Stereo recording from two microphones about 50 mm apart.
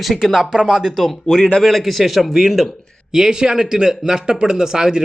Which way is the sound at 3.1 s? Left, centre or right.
Centre.